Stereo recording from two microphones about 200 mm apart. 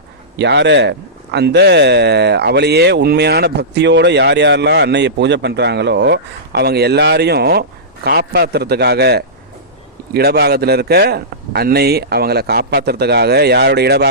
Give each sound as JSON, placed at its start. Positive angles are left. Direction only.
{"t": 0.3, "sound": "a man's voice", "side_deg": -60}